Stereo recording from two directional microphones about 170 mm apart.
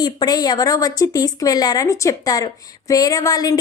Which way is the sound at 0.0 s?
25° left (ahead or behind).